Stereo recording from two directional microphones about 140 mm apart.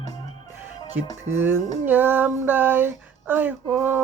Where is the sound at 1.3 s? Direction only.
15° right (ahead or behind).